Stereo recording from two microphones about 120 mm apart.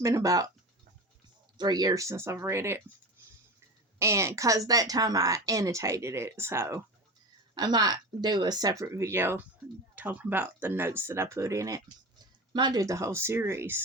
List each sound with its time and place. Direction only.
0.0 s a woman's voice: 25° right (ahead or behind)
1.5 s a woman's voice: 35° right (ahead or behind)
3.9 s a woman's voice: 25° right (ahead or behind)
7.5 s a woman's voice: 35° right (ahead or behind); by 13.8 s 20° right (ahead or behind)